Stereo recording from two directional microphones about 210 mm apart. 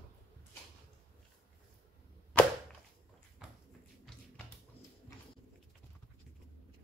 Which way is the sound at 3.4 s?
5° right (ahead or behind).